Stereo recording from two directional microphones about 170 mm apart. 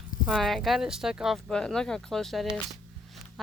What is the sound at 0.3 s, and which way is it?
Speech, centre (ahead or behind).